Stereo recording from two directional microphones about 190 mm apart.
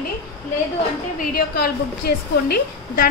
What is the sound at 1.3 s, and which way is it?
Speech, 55° left (ahead or behind).